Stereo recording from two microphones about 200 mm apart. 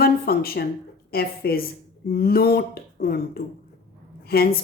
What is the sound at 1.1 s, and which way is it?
A woman's voice, 50° left (ahead or behind).